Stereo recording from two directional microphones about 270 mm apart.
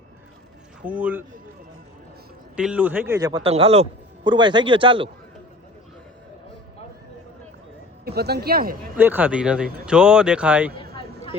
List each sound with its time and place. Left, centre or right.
0.8 s speech: centre
2.6 s a man's voice: centre
8.0 s speech: right
9.0 s speech: centre